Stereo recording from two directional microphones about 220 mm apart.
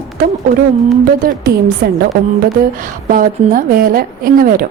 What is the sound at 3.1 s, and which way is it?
A woman's voice, 40° right (ahead or behind).